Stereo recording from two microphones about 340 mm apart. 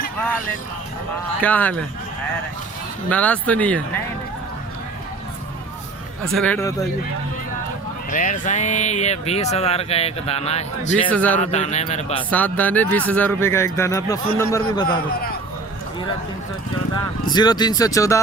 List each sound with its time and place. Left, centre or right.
1.4 s speech: centre
3.1 s speech: centre
6.2 s speech: centre
8.1 s speech: left
11.1 s speech: centre
11.3 s speech: centre
12.3 s speech: centre
16.9 s speech: centre